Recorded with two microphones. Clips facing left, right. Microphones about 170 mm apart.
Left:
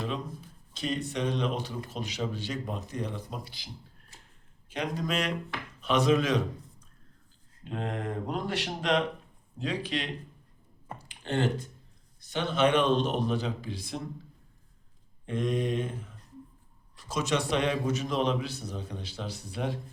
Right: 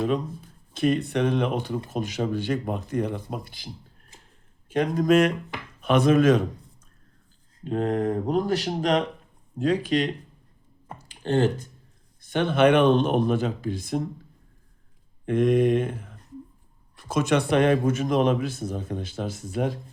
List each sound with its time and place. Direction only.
0.7 s a man's voice: 55° right (ahead or behind)
4.7 s a man's voice: 50° right (ahead or behind)
7.6 s a man's voice: 40° right (ahead or behind)
11.2 s speech: 40° right (ahead or behind)
12.2 s a man's voice: 55° right (ahead or behind)
15.3 s a man's voice: 55° right (ahead or behind)